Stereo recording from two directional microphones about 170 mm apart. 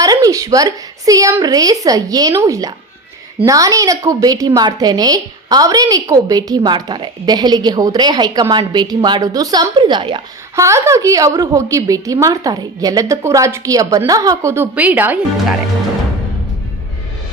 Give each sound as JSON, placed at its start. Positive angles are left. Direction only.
{"t": 0.0, "sound": "a woman's voice", "side_deg": -20}
{"t": 10.5, "sound": "a woman's voice", "side_deg": -15}